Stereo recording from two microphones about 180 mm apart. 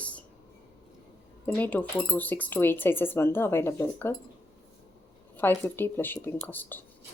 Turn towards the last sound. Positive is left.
turn(degrees=10)  # may be behind; listen again after turning